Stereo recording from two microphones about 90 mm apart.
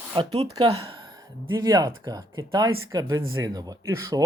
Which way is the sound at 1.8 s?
50° right (ahead or behind).